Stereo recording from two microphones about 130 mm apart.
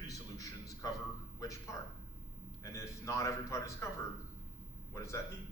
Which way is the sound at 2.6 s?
20° left (ahead or behind).